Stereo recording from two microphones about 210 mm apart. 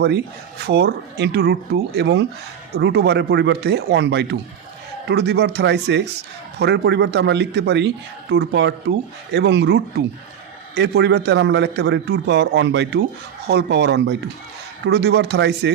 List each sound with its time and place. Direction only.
0.7 s a man's voice: 50° right (ahead or behind)